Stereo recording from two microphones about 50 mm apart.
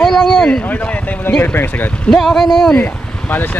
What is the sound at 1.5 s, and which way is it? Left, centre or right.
Speech, left.